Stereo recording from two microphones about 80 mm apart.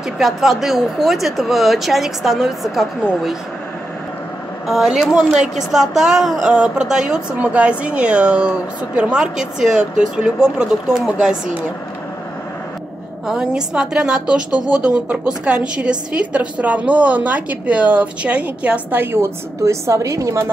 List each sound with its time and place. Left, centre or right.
0.2 s speech: centre
4.6 s a woman's voice: centre
13.3 s a woman's voice: centre
19.1 s a woman's voice: right